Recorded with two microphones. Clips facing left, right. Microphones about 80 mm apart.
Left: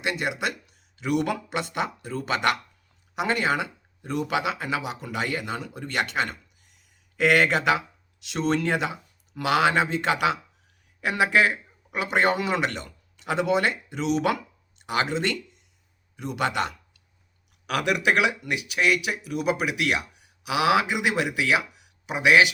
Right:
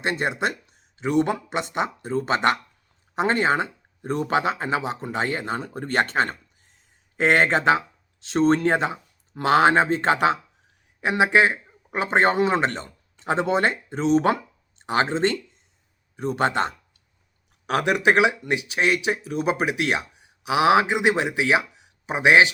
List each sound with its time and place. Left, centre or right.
0.0 s speech: right
11.0 s speech: right